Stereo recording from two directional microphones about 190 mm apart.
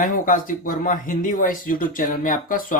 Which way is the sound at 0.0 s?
45° left (ahead or behind).